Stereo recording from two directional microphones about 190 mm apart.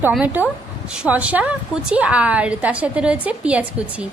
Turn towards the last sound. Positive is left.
turn(degrees=-5)  # may be behind; listen again after turning